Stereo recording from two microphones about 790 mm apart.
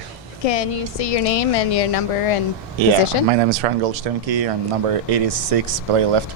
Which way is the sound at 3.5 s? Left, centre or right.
Right.